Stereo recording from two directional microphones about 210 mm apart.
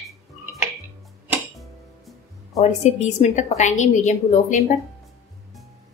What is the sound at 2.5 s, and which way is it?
A woman's voice, 35° left (ahead or behind).